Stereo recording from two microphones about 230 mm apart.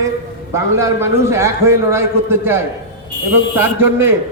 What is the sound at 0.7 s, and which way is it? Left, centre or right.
A man's voice, centre.